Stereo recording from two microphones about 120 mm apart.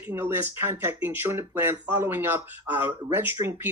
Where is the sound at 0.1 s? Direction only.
20° right (ahead or behind).